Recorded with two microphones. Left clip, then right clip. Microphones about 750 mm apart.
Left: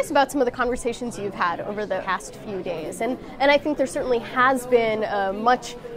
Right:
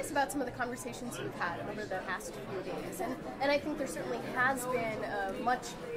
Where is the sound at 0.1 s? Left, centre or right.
Left.